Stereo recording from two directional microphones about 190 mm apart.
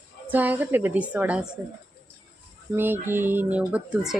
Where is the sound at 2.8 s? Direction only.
10° right (ahead or behind).